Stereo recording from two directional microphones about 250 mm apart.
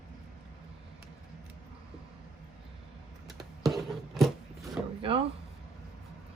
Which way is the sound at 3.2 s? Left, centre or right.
Centre.